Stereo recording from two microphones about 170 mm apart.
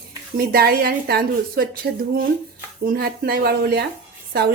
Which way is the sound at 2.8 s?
60° right (ahead or behind).